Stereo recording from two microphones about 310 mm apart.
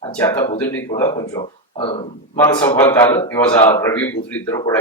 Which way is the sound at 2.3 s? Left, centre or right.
Centre.